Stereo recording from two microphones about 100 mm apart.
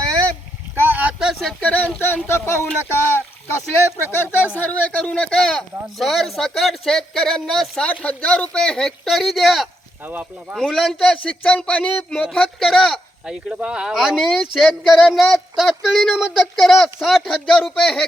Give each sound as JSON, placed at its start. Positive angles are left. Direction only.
{"t": 0.8, "sound": "boat", "side_deg": -20}
{"t": 1.2, "sound": "a sound", "side_deg": 0}
{"t": 1.6, "sound": "speech", "side_deg": 15}
{"t": 3.9, "sound": "speech", "side_deg": 20}
{"t": 10.0, "sound": "speech", "side_deg": -20}
{"t": 10.5, "sound": "speech", "side_deg": 5}
{"t": 13.2, "sound": "speech", "side_deg": -10}